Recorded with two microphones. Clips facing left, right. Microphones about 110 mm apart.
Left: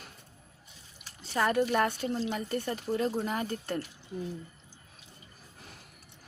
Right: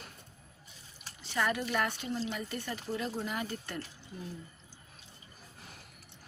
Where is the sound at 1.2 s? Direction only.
35° left (ahead or behind).